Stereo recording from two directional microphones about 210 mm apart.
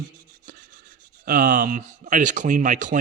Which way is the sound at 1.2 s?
40° right (ahead or behind).